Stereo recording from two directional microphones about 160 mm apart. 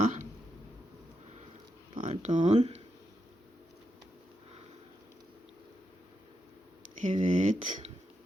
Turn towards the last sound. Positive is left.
turn(degrees=-50)  # may be behind; listen again after turning